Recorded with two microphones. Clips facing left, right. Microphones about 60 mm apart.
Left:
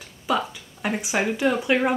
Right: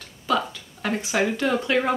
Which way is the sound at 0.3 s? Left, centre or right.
Centre.